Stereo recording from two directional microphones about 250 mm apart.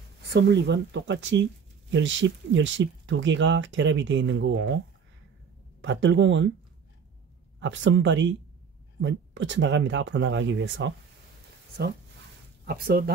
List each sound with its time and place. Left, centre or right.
0.3 s speech: right
5.8 s speech: right
7.6 s speech: right
12.6 s speech: right